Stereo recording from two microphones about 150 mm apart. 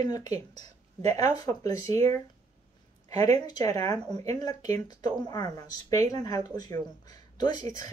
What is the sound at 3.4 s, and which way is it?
Speech, 25° left (ahead or behind).